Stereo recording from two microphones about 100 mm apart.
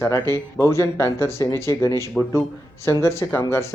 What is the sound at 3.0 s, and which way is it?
Speech, 25° left (ahead or behind).